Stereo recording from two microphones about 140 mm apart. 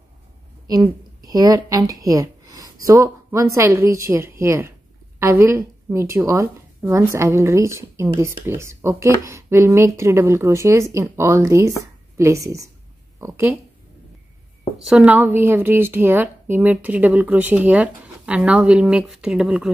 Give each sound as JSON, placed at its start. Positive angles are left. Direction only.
{"t": 0.7, "sound": "a woman's voice", "side_deg": -25}
{"t": 14.9, "sound": "speech", "side_deg": -10}